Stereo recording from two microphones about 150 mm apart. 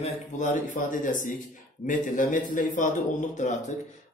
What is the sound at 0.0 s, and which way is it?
A man's voice, 55° left (ahead or behind).